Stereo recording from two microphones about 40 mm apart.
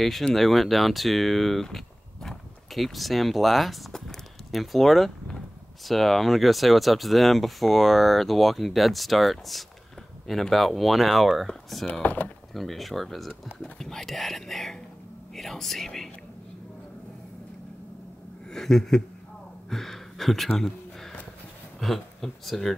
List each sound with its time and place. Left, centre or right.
0.3 s speech: centre
11.9 s speech: left
12.5 s speech: centre
18.5 s speech: centre
19.7 s gasp: centre
21.7 s speech: centre